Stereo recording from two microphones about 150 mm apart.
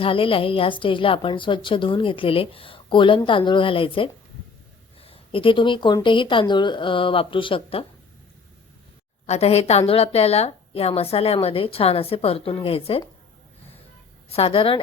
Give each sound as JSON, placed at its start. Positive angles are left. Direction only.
{"t": 0.0, "sound": "a woman's voice", "side_deg": 35}
{"t": 9.2, "sound": "a woman's voice", "side_deg": 45}
{"t": 14.3, "sound": "a woman's voice", "side_deg": 40}